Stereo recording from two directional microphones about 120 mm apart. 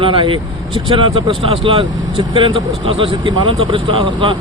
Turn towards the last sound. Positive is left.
turn(degrees=-45)  # may be behind; listen again after turning